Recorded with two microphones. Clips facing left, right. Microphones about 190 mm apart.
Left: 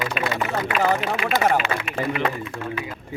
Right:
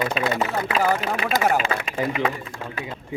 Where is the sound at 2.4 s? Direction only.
35° right (ahead or behind).